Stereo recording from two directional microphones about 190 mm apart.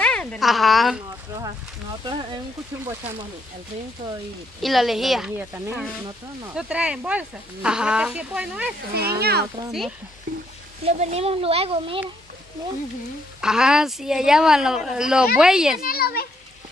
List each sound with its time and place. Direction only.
0.0 s speech: 5° left (ahead or behind)
1.3 s speech: 20° right (ahead or behind)
4.6 s speech: centre (ahead or behind)
6.5 s speech: 5° right (ahead or behind)
8.9 s speech: 55° right (ahead or behind)
9.7 s speech: centre (ahead or behind)
10.8 s speech: 35° right (ahead or behind)
13.4 s speech: 5° right (ahead or behind)
15.8 s a child's voice: 50° left (ahead or behind)